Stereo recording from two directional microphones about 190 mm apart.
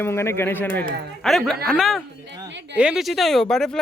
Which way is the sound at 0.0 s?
15° left (ahead or behind).